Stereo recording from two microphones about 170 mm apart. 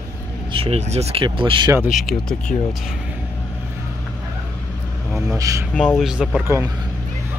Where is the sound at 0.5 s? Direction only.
35° right (ahead or behind).